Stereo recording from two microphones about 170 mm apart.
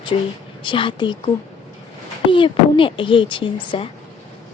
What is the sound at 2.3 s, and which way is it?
Speech, 30° left (ahead or behind).